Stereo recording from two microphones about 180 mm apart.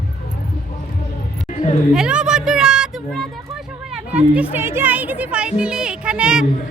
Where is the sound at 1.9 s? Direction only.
5° right (ahead or behind).